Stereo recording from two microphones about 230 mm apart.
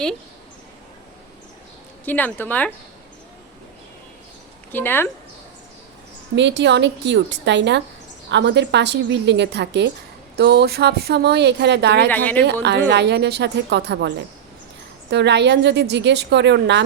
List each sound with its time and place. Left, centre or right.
2.0 s speech: centre
4.7 s speech: centre
6.3 s speech: right
12.0 s speech: centre
12.9 s speech: right